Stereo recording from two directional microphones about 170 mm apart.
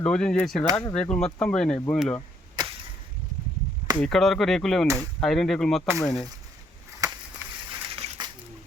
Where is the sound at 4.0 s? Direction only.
5° left (ahead or behind).